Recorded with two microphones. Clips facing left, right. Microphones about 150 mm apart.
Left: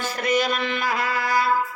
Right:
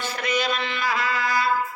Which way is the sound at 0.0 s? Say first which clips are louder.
Left 3 dB; 45° left (ahead or behind).